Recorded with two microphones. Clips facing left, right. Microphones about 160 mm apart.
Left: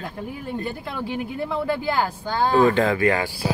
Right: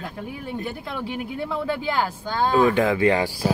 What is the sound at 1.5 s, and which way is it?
Speech, 10° left (ahead or behind).